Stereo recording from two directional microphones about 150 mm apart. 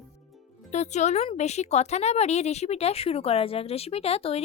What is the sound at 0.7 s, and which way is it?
A woman's voice, 50° left (ahead or behind).